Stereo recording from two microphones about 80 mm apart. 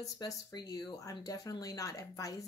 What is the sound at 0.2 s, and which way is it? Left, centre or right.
A woman's voice, left.